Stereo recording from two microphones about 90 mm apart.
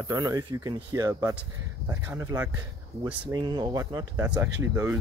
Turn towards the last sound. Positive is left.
turn(degrees=-25)  # may be behind; listen again after turning